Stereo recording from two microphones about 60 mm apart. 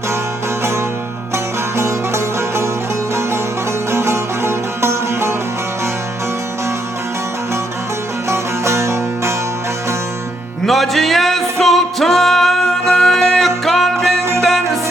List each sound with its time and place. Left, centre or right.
1.7 s music: right
3.9 s music: right
8.3 s music: right
10.7 s music: centre